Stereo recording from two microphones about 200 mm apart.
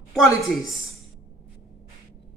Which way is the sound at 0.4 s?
Centre (ahead or behind).